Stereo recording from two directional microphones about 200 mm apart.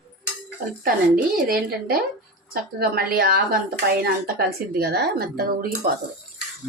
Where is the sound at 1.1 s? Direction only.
50° right (ahead or behind).